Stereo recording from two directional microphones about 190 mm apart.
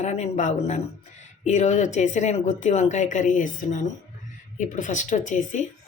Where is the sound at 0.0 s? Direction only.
35° left (ahead or behind).